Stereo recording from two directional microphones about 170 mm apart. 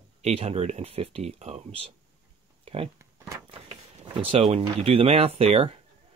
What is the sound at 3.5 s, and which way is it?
Speech, 35° right (ahead or behind).